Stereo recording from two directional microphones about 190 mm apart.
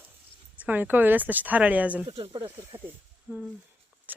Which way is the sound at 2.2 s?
25° right (ahead or behind).